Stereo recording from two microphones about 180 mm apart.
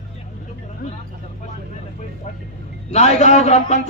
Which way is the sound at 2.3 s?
40° left (ahead or behind).